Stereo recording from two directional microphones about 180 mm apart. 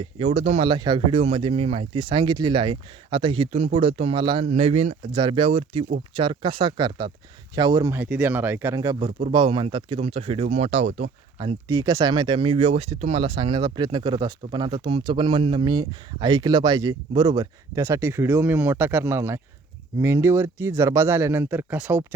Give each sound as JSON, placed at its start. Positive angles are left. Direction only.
{"t": 0.0, "sound": "speech", "side_deg": -35}
{"t": 11.3, "sound": "speech", "side_deg": -20}